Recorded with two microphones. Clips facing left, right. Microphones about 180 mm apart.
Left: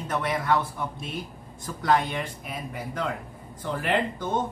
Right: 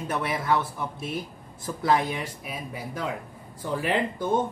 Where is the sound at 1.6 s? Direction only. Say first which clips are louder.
Even; 5° right (ahead or behind).